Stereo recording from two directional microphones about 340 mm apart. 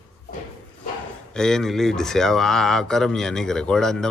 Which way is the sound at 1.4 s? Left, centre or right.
Centre.